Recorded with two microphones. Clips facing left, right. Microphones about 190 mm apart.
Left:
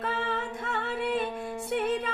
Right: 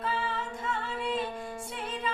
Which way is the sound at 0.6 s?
60° left (ahead or behind).